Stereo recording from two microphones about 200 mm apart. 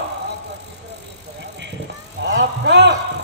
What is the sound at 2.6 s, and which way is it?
Speech, 60° right (ahead or behind).